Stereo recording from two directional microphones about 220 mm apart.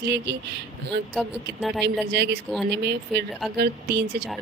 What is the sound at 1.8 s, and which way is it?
Speech, 50° right (ahead or behind).